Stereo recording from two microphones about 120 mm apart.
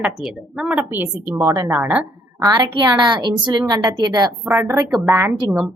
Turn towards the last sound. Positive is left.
turn(degrees=-20)  # may be behind; listen again after turning